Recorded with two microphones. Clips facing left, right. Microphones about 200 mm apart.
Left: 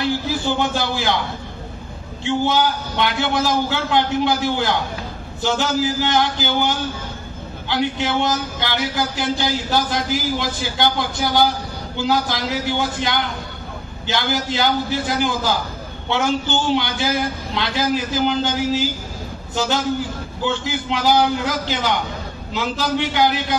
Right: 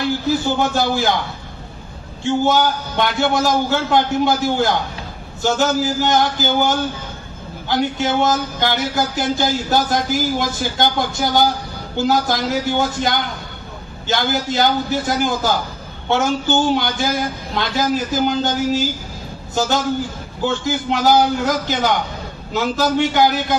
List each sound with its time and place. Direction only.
0.6 s speech: 45° right (ahead or behind)
2.2 s speech: 45° right (ahead or behind)
20.4 s speech: 45° right (ahead or behind)